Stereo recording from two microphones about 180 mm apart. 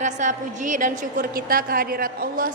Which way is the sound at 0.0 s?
45° right (ahead or behind).